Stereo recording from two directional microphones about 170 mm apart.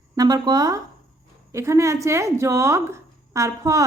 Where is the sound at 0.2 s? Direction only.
20° right (ahead or behind).